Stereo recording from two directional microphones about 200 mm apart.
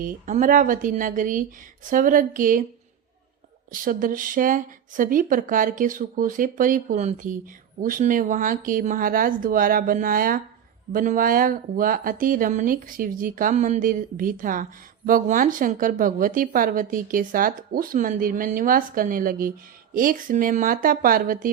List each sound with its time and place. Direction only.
0.0 s speech: 40° right (ahead or behind)
3.7 s speech: 40° right (ahead or behind)